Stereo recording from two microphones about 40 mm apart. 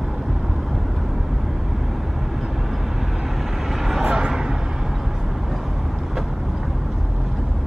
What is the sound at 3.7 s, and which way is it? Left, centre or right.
Vehicle, centre.